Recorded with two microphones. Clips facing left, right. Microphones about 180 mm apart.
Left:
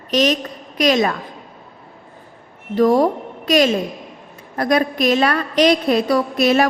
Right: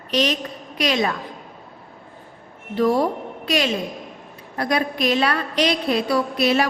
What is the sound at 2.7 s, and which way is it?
A woman's voice, 45° left (ahead or behind).